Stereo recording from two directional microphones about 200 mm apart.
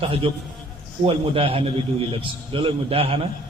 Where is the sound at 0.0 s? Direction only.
25° right (ahead or behind).